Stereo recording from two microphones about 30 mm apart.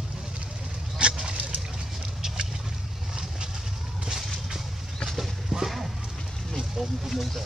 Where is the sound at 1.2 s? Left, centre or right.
Right.